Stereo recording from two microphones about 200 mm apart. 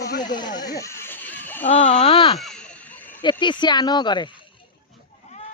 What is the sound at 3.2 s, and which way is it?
Speech, 25° left (ahead or behind).